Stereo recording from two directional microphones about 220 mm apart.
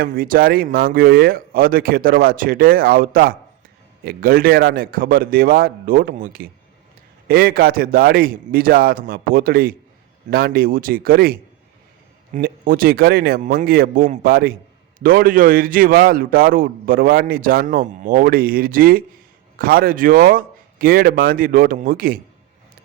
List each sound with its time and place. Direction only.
0.0 s a man's voice: 40° right (ahead or behind)